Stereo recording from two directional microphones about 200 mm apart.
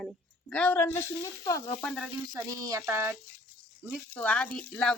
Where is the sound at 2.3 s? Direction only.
15° right (ahead or behind).